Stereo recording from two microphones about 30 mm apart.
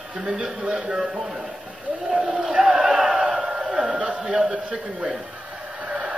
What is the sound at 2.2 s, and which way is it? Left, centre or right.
Speech, centre.